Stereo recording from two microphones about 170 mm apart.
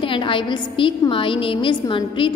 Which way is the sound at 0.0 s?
30° left (ahead or behind).